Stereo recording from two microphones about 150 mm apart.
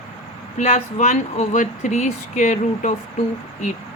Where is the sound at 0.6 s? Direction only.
45° left (ahead or behind).